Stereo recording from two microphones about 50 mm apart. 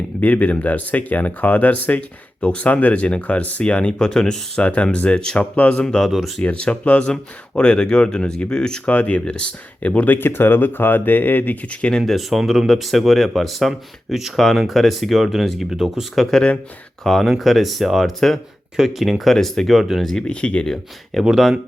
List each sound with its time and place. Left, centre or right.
0.2 s speech: left; by 4.6 s centre
4.6 s speech: left
5.8 s speech: centre
6.1 s speech: centre
6.4 s speech: left
8.9 s speech: left
10.2 s speech: left
11.7 s speech: left
12.1 s speech: centre
16.1 s speech: centre
20.1 s speech: left
21.2 s speech: centre